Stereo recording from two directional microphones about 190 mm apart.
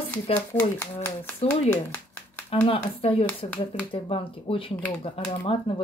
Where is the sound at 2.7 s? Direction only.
30° left (ahead or behind).